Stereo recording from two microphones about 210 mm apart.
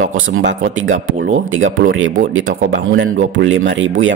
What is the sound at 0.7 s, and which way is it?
Speech, 65° right (ahead or behind).